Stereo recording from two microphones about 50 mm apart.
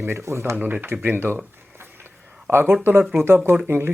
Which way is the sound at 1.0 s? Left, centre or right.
Right.